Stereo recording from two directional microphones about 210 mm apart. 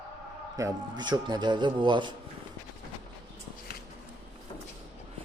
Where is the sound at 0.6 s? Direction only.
15° right (ahead or behind).